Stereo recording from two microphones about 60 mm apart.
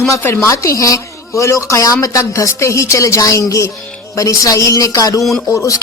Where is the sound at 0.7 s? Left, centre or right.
Left.